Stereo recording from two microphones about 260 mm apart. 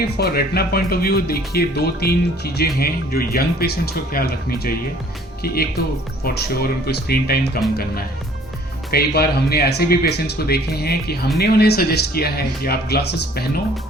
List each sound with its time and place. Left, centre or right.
0.0 s speech: left
8.9 s speech: left